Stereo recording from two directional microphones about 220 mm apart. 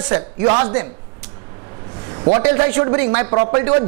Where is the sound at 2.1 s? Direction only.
25° right (ahead or behind).